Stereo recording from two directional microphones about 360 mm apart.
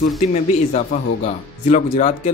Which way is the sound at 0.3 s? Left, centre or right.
Centre.